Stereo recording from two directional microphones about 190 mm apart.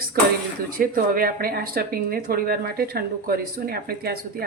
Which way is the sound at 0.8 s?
50° right (ahead or behind).